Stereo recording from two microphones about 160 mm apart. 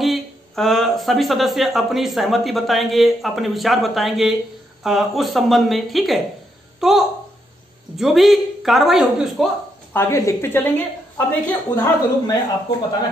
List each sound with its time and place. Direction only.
0.0 s speech: centre (ahead or behind)
9.9 s a woman's voice: 20° left (ahead or behind)